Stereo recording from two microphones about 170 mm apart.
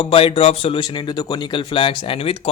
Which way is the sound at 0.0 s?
35° left (ahead or behind).